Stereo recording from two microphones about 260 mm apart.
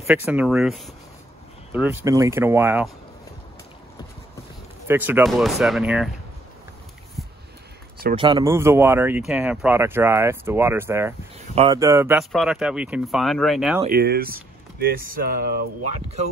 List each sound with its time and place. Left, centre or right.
0.0 s speech: centre
4.8 s speech: centre
7.2 s a sound: centre
8.2 s speech: centre
13.8 s speech: right